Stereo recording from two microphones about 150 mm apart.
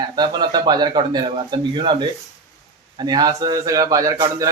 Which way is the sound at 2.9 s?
25° right (ahead or behind).